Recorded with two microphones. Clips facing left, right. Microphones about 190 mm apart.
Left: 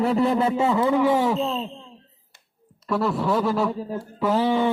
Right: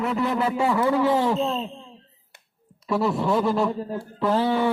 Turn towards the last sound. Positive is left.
turn(degrees=15)  # may be behind; listen again after turning